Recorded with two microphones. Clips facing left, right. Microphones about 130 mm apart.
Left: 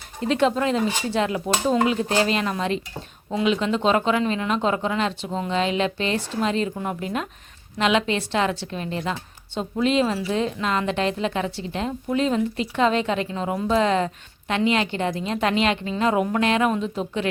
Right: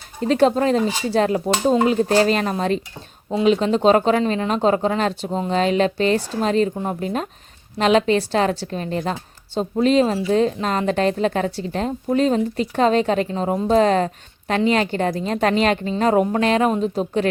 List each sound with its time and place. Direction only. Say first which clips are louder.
0.2 s a woman's voice: right 4 dB; 40° right (ahead or behind)